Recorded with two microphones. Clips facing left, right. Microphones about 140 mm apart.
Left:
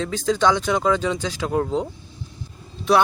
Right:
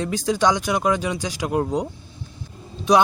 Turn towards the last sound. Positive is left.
turn(degrees=-15)  # may be behind; listen again after turning